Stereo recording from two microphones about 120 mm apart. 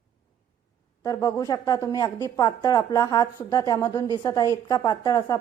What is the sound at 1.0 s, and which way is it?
A woman's voice, 25° left (ahead or behind).